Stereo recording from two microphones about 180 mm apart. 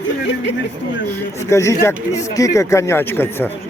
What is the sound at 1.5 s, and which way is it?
Speech, 15° left (ahead or behind).